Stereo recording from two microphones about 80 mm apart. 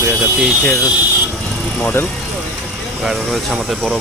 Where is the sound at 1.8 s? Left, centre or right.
Left.